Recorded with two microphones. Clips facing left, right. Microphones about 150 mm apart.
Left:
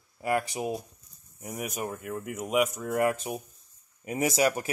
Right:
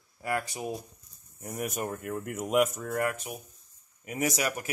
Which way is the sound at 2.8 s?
20° left (ahead or behind).